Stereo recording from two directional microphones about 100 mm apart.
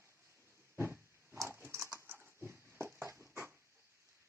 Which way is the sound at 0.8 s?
25° right (ahead or behind).